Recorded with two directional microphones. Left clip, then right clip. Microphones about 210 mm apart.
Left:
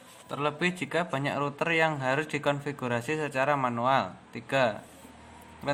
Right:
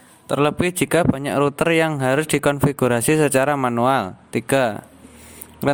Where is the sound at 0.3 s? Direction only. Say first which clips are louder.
Right 10 dB; 50° right (ahead or behind).